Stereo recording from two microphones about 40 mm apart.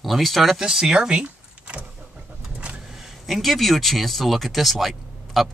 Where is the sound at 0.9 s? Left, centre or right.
Right.